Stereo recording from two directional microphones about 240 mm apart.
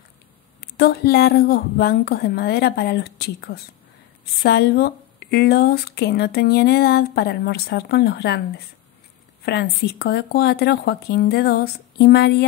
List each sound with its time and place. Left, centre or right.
0.7 s speech: left
9.4 s speech: left